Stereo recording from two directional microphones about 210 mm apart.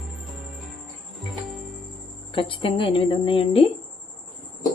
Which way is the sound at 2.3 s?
25° left (ahead or behind).